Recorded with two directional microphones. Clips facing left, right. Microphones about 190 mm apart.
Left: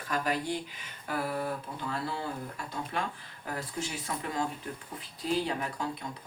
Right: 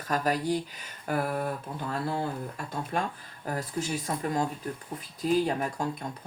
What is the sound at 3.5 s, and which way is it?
Speech, 40° right (ahead or behind).